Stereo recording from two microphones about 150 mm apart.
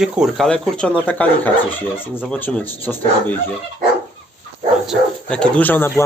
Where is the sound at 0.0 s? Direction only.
Centre (ahead or behind).